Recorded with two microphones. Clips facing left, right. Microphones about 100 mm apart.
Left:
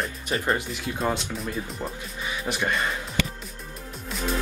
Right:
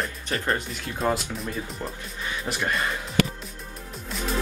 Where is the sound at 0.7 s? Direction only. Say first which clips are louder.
Right 1 dB; centre (ahead or behind).